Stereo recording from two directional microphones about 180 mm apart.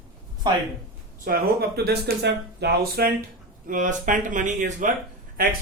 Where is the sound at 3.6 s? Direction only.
50° right (ahead or behind).